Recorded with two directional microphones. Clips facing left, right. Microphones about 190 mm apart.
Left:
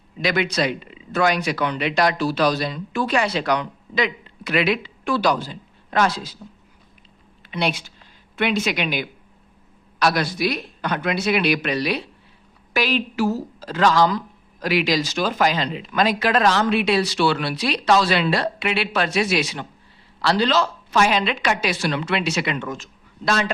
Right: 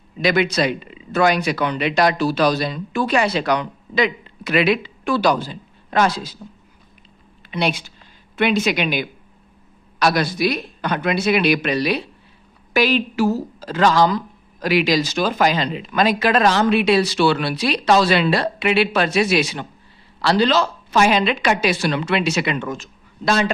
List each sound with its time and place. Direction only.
0.2 s speech: 10° right (ahead or behind)
7.5 s a woman's voice: centre (ahead or behind)
13.2 s a woman's voice: 25° right (ahead or behind)
14.6 s a woman's voice: 5° right (ahead or behind)
22.8 s a sound: centre (ahead or behind)